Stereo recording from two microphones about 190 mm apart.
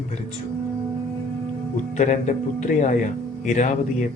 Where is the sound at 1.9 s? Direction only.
40° left (ahead or behind).